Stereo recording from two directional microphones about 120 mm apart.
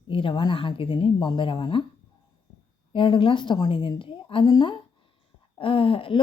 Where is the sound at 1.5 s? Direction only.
40° left (ahead or behind).